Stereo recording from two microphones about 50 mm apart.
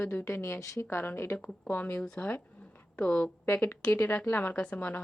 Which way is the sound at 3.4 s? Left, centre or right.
Left.